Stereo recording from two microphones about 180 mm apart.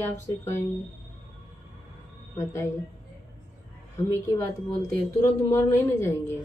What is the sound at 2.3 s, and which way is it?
Speech, 15° left (ahead or behind).